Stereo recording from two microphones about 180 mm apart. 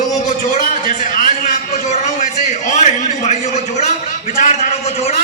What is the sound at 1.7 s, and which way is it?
A man's voice, 40° left (ahead or behind).